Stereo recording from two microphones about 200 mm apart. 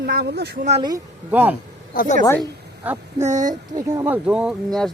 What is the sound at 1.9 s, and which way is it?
Speech, 45° left (ahead or behind).